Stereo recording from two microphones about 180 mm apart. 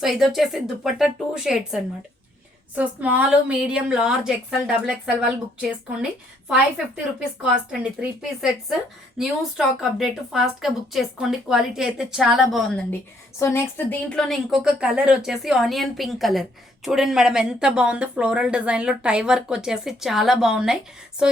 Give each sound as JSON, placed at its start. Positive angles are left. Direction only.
{"t": 0.0, "sound": "speech", "side_deg": 0}
{"t": 13.4, "sound": "speech", "side_deg": 15}